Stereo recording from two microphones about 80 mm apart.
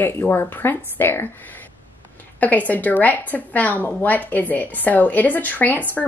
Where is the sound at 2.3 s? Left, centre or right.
Left.